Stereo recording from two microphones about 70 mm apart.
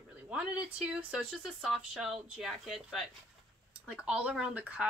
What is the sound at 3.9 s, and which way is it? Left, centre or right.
Speech, centre.